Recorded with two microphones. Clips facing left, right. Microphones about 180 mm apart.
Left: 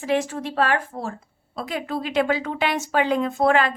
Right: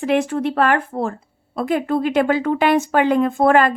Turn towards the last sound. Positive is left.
turn(degrees=-50)  # may be behind; listen again after turning